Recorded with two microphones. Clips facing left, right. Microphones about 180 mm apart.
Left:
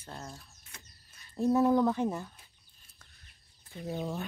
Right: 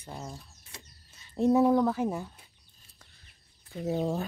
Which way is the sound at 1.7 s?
5° right (ahead or behind).